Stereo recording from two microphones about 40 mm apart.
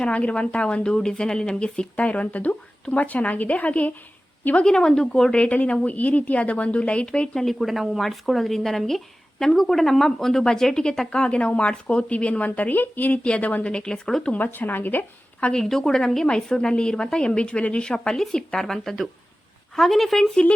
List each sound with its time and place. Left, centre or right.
0.0 s a woman's voice: left
2.0 s speech: left
4.6 s speech: centre
5.3 s a woman's voice: left
7.6 s speech: centre
11.1 s a woman's voice: left
13.2 s a woman's voice: left
13.9 s speech: centre
14.3 s a woman's voice: left
15.5 s a woman's voice: centre; by 17.9 s left
17.9 s speech: centre